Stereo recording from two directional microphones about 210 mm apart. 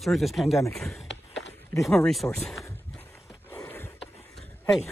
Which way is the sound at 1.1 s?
60° left (ahead or behind).